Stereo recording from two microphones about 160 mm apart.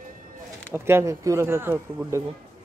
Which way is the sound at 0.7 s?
15° right (ahead or behind).